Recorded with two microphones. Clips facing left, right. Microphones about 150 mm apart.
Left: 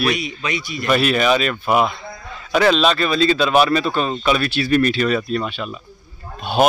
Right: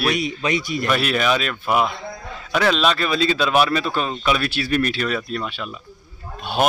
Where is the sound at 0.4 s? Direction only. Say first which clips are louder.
Right 3 dB; 45° right (ahead or behind).